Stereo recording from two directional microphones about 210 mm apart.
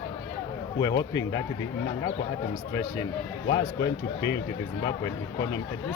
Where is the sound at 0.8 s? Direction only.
15° left (ahead or behind).